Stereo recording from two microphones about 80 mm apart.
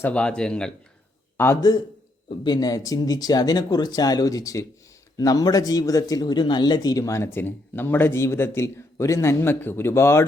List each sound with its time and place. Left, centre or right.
0.1 s speech: centre
1.4 s a man's voice: left
2.4 s speech: left